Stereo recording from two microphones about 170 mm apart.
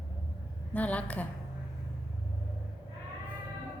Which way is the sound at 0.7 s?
10° left (ahead or behind).